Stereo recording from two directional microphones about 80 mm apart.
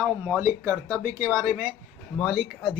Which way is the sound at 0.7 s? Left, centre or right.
Right.